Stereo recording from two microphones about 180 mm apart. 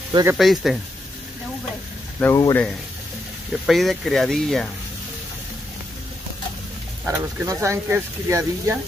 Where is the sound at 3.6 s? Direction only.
Centre (ahead or behind).